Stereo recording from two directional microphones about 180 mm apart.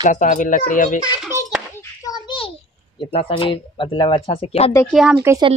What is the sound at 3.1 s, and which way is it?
Speech, 30° left (ahead or behind).